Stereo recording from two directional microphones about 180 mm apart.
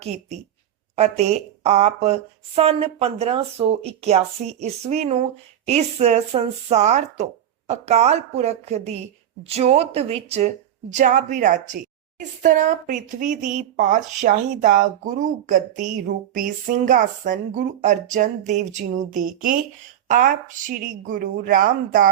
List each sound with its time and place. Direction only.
0.9 s speech: 40° right (ahead or behind)